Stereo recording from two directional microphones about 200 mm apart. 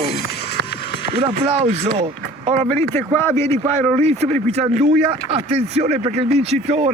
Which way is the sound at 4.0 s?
30° right (ahead or behind).